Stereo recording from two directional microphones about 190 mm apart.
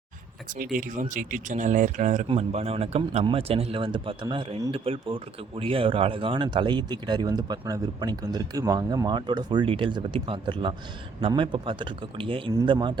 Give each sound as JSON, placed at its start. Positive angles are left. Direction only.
{"t": 0.6, "sound": "speech", "side_deg": -45}